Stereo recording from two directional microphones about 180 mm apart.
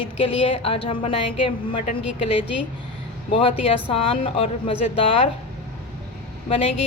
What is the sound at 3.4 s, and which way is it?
A woman's voice, 30° left (ahead or behind).